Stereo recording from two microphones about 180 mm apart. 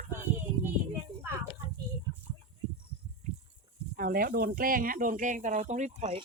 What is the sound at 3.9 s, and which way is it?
Speech, 55° right (ahead or behind).